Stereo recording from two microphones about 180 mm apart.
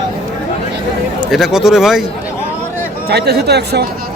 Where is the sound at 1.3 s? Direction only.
Centre (ahead or behind).